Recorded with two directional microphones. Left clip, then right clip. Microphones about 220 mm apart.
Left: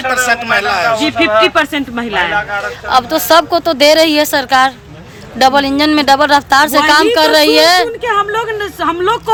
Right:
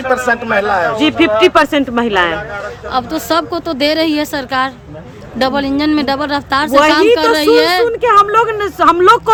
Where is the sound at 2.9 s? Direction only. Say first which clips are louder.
Left 6 dB; 5° right (ahead or behind).